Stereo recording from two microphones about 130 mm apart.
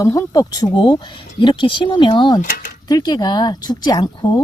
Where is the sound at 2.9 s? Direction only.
30° left (ahead or behind).